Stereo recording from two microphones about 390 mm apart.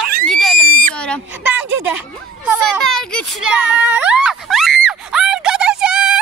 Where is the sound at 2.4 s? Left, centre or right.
Centre.